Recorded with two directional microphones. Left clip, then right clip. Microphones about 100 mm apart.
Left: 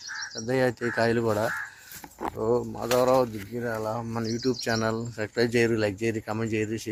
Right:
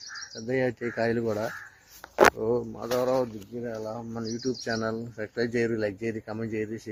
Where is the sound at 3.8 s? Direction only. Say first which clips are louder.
Left 4 dB; 25° left (ahead or behind).